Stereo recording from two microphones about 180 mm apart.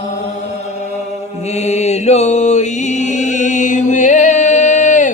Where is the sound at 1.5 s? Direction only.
40° left (ahead or behind).